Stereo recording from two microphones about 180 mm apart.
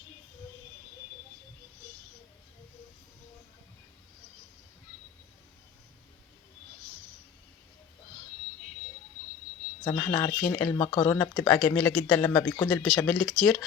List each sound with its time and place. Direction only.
10.0 s speech: 20° left (ahead or behind); by 13.7 s centre (ahead or behind)